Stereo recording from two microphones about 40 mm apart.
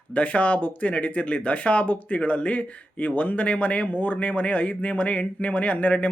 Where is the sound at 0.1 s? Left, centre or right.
Left.